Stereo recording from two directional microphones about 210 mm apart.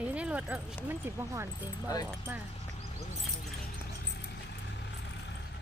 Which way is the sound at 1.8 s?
15° left (ahead or behind).